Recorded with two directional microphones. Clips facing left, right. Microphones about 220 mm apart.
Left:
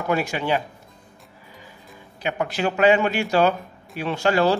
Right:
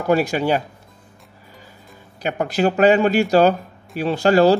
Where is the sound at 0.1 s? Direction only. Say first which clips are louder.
Right 6 dB; 40° right (ahead or behind).